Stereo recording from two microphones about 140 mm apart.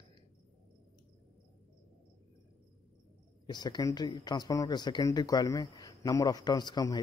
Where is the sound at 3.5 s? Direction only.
30° left (ahead or behind).